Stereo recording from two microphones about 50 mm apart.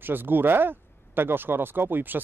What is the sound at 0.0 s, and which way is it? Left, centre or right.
Speech, right.